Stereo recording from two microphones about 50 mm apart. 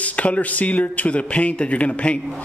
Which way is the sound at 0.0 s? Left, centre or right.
Left.